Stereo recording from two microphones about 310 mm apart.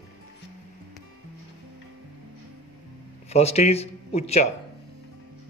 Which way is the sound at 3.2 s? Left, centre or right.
Centre.